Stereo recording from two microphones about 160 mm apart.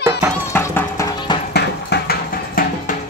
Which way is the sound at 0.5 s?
15° left (ahead or behind).